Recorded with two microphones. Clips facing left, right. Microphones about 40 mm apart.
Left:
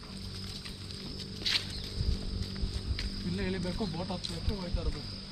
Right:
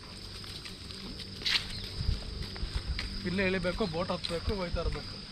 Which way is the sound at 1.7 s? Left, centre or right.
Centre.